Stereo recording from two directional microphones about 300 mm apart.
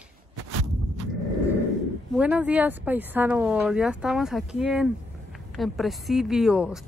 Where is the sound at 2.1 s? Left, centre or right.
Centre.